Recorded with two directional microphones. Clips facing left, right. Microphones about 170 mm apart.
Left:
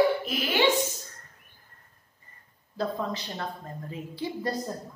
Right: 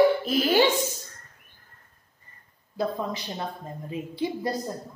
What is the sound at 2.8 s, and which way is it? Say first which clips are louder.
A woman's voice: right 2 dB; 15° right (ahead or behind).